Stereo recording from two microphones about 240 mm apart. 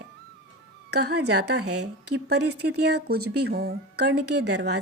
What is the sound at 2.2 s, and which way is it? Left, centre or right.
A woman's voice, right.